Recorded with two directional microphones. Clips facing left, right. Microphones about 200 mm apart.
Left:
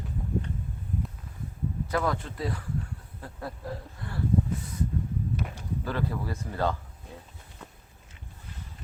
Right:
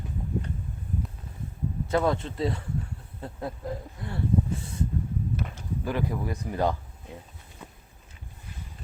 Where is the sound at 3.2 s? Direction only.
20° right (ahead or behind).